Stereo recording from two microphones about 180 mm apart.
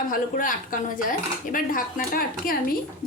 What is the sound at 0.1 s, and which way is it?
Speech, 50° left (ahead or behind).